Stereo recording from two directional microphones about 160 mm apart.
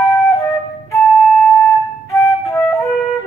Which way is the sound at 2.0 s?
20° left (ahead or behind).